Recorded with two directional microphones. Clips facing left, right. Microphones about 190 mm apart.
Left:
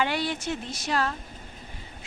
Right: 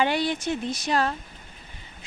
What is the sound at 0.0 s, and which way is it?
Speech, 20° right (ahead or behind).